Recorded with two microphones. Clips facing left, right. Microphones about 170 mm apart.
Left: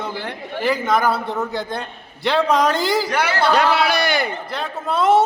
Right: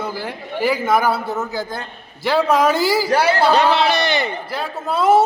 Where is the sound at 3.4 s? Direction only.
5° left (ahead or behind).